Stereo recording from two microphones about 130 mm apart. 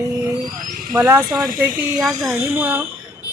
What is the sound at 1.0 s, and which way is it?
Speech, 25° right (ahead or behind).